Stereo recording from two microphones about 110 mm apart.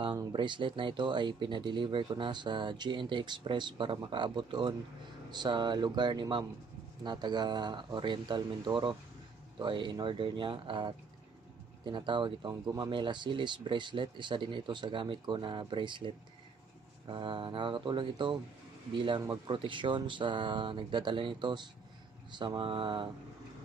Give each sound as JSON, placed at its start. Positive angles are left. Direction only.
{"t": 0.3, "sound": "speech", "side_deg": -45}
{"t": 17.1, "sound": "speech", "side_deg": -45}